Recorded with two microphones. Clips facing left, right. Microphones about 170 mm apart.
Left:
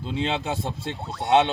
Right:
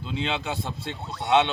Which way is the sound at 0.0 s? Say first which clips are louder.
Left 2 dB; 35° left (ahead or behind).